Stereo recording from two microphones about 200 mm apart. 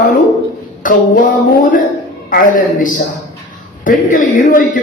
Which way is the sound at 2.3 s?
40° left (ahead or behind).